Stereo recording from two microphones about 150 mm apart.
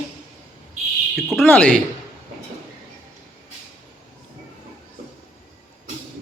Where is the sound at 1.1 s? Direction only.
Centre (ahead or behind).